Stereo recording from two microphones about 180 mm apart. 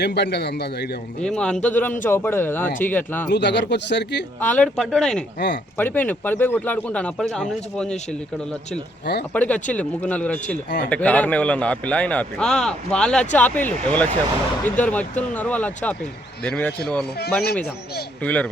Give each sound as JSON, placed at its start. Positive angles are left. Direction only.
{"t": 0.0, "sound": "speech", "side_deg": 70}
{"t": 1.2, "sound": "a man's voice", "side_deg": 5}
{"t": 3.2, "sound": "speech", "side_deg": 70}
{"t": 4.4, "sound": "a man's voice", "side_deg": 10}
{"t": 9.3, "sound": "a man's voice", "side_deg": 5}
{"t": 17.2, "sound": "speech", "side_deg": 65}
{"t": 18.2, "sound": "a man's voice", "side_deg": 10}